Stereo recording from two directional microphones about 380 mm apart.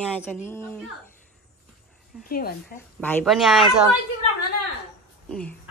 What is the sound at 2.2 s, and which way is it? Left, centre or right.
Speech, left.